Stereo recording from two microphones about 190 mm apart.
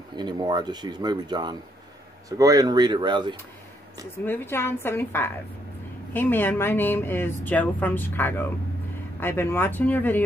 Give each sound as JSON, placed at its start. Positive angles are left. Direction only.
{"t": 0.1, "sound": "speech", "side_deg": -20}
{"t": 4.3, "sound": "speech", "side_deg": 10}